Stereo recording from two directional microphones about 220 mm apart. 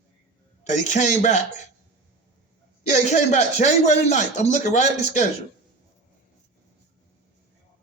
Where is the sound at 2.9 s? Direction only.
30° left (ahead or behind).